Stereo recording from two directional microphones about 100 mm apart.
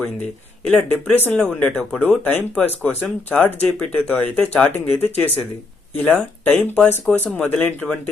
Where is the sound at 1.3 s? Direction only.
10° left (ahead or behind).